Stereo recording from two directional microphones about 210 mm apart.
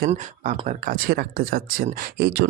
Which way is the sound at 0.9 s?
45° right (ahead or behind).